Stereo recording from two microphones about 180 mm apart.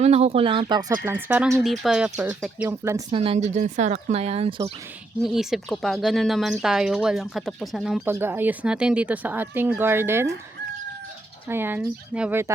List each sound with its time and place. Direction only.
0.0 s speech: 35° right (ahead or behind)
1.0 s speech: 10° right (ahead or behind)
2.6 s speech: 15° right (ahead or behind)
3.1 s speech: 35° right (ahead or behind)
5.2 s speech: centre (ahead or behind)
8.0 s speech: 10° right (ahead or behind)
11.4 s speech: 10° right (ahead or behind)